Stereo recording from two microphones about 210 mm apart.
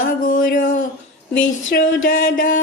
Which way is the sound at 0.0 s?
40° left (ahead or behind).